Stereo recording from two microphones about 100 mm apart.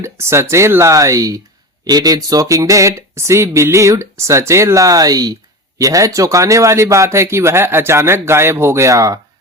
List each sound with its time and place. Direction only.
0.0 s speech: 25° right (ahead or behind)